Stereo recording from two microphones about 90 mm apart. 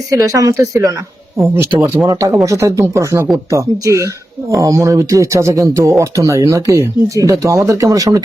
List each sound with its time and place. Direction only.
0.1 s speech: 35° right (ahead or behind)
2.0 s speech: 40° right (ahead or behind)